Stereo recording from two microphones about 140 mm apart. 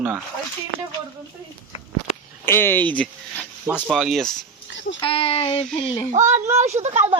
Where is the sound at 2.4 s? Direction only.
15° left (ahead or behind).